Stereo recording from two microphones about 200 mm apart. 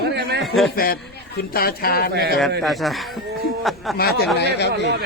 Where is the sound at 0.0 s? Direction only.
55° right (ahead or behind).